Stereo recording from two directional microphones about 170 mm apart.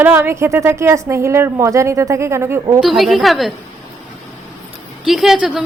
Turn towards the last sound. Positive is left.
turn(degrees=0)  # may be behind; listen again after turning